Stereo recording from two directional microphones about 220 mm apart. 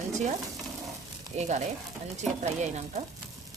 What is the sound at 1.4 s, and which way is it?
A woman's voice, 30° right (ahead or behind).